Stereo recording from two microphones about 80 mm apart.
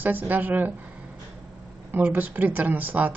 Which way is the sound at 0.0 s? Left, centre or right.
Right.